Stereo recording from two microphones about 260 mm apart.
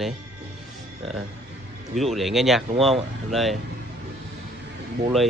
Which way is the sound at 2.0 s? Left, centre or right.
Centre.